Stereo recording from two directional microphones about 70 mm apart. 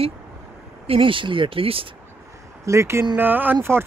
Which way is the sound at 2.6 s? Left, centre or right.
Right.